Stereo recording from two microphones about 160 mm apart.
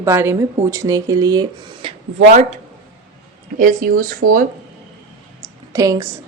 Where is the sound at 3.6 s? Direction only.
60° right (ahead or behind).